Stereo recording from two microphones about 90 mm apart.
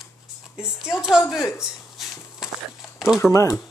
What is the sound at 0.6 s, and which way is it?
Speech, 5° right (ahead or behind).